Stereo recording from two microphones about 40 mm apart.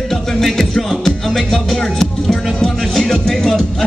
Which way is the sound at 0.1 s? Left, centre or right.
Centre.